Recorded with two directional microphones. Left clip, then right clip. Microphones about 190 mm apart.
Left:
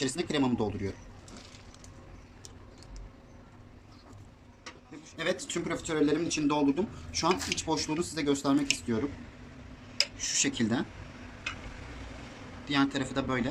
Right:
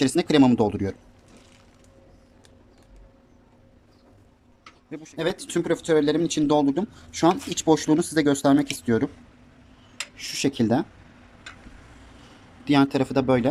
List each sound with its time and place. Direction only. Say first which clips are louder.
0.0 s speech: right 11 dB; 60° right (ahead or behind)
4.9 s speech: right 5 dB; 50° right (ahead or behind)
10.2 s speech: right 5 dB; 45° right (ahead or behind)
12.6 s speech: right 8 dB; 45° right (ahead or behind)